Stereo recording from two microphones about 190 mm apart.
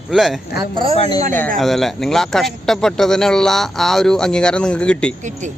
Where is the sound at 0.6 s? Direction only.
25° right (ahead or behind).